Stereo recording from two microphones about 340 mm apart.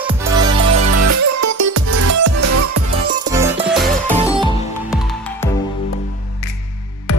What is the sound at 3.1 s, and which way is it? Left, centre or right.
Music, centre.